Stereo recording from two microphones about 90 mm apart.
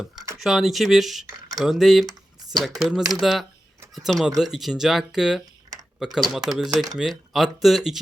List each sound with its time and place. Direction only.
0.3 s speech: centre (ahead or behind)
1.3 s speech: 45° right (ahead or behind)
1.6 s speech: 5° right (ahead or behind)